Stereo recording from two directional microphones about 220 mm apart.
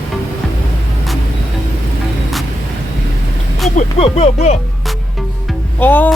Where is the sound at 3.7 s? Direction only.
30° left (ahead or behind).